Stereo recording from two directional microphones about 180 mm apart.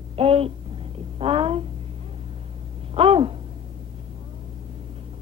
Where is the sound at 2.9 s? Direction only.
30° right (ahead or behind).